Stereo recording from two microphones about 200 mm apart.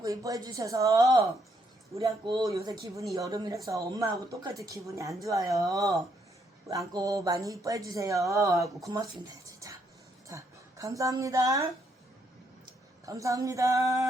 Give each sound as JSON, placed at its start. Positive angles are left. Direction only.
{"t": 0.0, "sound": "a woman's voice", "side_deg": -15}
{"t": 13.1, "sound": "speech", "side_deg": -15}